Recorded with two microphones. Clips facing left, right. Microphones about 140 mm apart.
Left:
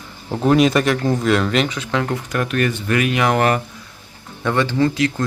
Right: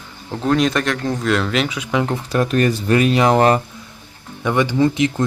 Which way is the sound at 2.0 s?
25° right (ahead or behind).